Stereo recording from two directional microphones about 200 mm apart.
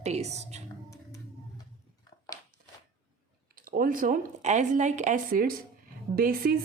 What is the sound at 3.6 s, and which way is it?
A woman's voice, 45° right (ahead or behind).